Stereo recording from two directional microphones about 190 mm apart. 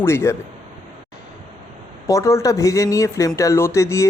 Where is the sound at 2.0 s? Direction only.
15° left (ahead or behind).